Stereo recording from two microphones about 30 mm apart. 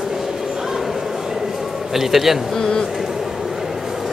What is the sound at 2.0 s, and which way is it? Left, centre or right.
Speech, centre.